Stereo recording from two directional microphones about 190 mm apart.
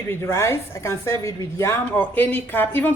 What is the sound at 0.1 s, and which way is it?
Speech, 15° left (ahead or behind).